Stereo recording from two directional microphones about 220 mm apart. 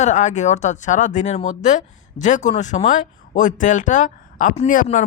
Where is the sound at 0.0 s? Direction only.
30° left (ahead or behind).